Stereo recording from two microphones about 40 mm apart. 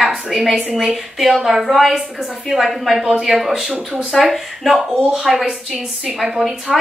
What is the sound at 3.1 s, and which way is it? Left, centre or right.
Speech, right.